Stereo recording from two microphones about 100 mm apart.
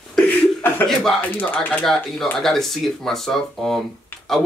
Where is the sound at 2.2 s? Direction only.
5° left (ahead or behind).